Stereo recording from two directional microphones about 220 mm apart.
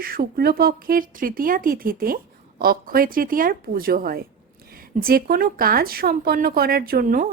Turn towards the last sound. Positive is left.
turn(degrees=-40)  # may be behind; listen again after turning